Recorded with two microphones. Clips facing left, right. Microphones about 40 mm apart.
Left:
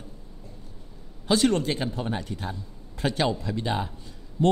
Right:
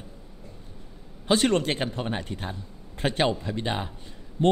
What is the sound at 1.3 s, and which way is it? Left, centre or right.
Speech, right.